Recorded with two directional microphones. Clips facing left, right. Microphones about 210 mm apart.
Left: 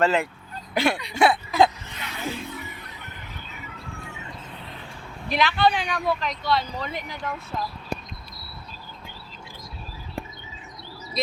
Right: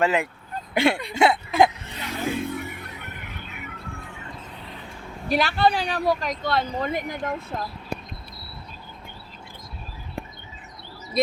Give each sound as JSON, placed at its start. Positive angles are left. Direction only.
{"t": 0.0, "sound": "speech", "side_deg": -15}
{"t": 0.7, "sound": "speech", "side_deg": -25}
{"t": 2.0, "sound": "music", "side_deg": -50}
{"t": 5.3, "sound": "speech", "side_deg": -40}